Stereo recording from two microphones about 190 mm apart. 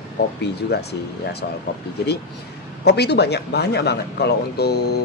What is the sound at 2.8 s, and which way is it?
Speech, 60° left (ahead or behind).